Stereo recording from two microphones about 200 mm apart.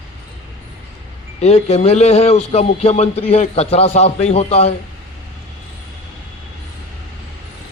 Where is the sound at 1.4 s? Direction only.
35° left (ahead or behind).